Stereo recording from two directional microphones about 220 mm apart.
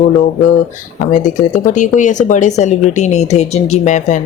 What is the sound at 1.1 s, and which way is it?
Speech, 35° left (ahead or behind).